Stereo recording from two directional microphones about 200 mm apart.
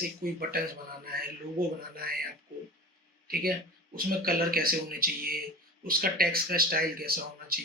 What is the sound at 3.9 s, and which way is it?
Speech, 45° right (ahead or behind).